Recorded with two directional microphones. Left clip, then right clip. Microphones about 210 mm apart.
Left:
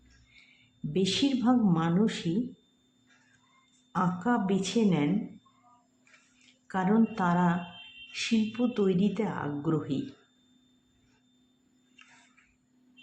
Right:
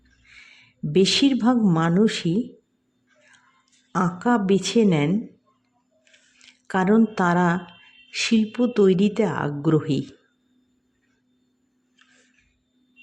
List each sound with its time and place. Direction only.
0.9 s a woman's voice: 35° right (ahead or behind)
3.9 s a woman's voice: 40° right (ahead or behind)
6.4 s a woman's voice: 35° right (ahead or behind)